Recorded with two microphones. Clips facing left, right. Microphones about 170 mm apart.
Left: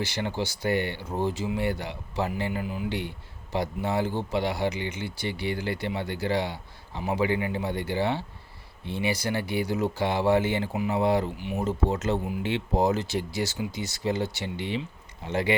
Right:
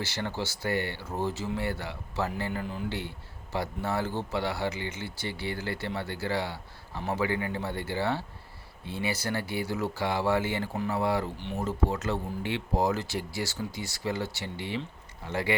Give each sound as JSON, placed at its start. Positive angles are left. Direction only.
{"t": 0.0, "sound": "speech", "side_deg": 15}
{"t": 3.5, "sound": "speech", "side_deg": 15}
{"t": 11.3, "sound": "speech", "side_deg": 10}
{"t": 11.6, "sound": "speech", "side_deg": 20}